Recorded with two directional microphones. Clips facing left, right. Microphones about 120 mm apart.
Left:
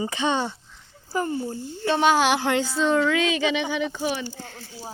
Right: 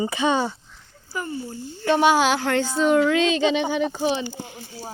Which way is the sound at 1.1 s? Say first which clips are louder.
Left 5 dB; 35° left (ahead or behind).